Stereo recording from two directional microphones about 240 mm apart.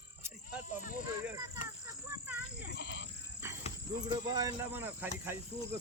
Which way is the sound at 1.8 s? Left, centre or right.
Centre.